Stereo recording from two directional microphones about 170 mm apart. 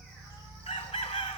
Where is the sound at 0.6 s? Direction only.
35° left (ahead or behind).